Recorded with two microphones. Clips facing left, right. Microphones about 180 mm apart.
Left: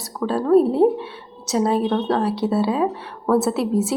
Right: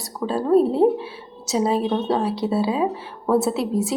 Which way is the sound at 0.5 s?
Centre (ahead or behind).